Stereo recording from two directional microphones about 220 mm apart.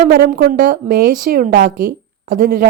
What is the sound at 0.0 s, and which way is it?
A woman's voice, 40° right (ahead or behind).